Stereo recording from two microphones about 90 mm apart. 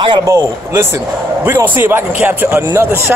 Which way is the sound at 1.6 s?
25° right (ahead or behind).